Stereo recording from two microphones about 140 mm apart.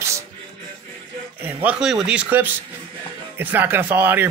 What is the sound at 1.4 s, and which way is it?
Speech, 10° right (ahead or behind).